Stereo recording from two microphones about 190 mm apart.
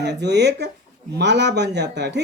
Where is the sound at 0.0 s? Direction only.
65° right (ahead or behind).